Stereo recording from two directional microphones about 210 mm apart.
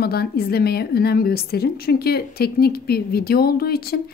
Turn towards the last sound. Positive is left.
turn(degrees=50)  # may be behind; listen again after turning